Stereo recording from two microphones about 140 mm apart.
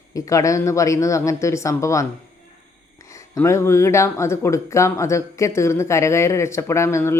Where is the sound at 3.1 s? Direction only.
20° left (ahead or behind).